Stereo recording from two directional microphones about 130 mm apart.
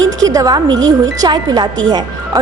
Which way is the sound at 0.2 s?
25° right (ahead or behind).